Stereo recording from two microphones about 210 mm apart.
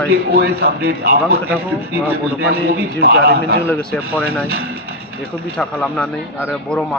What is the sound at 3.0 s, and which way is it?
Speech, 45° right (ahead or behind).